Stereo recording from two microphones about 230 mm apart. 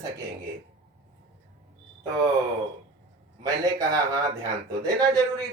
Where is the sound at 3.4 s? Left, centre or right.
Centre.